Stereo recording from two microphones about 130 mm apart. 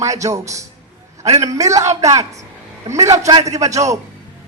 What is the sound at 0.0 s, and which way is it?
Speech, 25° right (ahead or behind).